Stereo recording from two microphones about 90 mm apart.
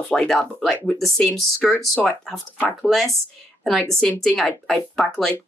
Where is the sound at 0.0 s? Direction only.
10° left (ahead or behind).